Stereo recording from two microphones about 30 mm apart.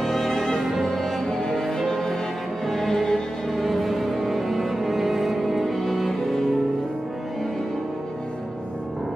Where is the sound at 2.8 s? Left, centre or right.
Centre.